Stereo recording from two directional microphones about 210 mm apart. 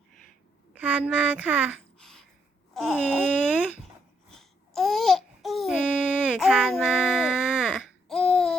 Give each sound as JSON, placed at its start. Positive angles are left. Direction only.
{"t": 0.7, "sound": "a child's voice", "side_deg": -5}
{"t": 2.0, "sound": "a sound", "side_deg": 5}
{"t": 2.7, "sound": "speech", "side_deg": 0}
{"t": 4.3, "sound": "babbling", "side_deg": 0}